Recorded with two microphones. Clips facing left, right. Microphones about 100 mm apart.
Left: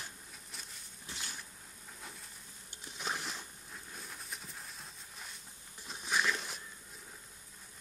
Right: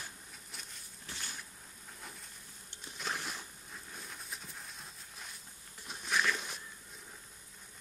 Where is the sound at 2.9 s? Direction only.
10° left (ahead or behind).